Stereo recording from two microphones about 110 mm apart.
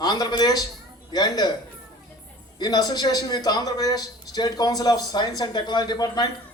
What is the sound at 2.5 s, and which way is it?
Speech, 35° left (ahead or behind).